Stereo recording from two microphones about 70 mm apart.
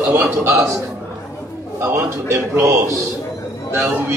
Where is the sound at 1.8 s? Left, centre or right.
Right.